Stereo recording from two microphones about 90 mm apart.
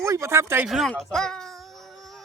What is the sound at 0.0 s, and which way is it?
Speech, 30° right (ahead or behind).